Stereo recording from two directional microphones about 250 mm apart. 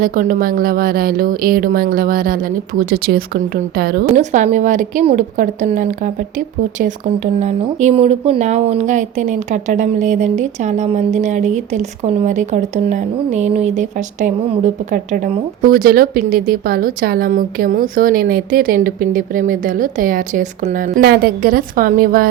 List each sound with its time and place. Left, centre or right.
0.0 s speech: right